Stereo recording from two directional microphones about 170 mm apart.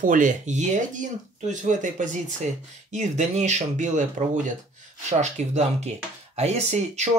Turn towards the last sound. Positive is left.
turn(degrees=-40)  # may be behind; listen again after turning